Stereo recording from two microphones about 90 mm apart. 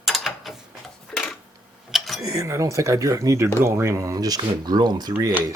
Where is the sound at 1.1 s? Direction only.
15° left (ahead or behind).